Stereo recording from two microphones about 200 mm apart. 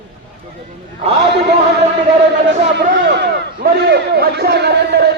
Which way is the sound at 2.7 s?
60° right (ahead or behind).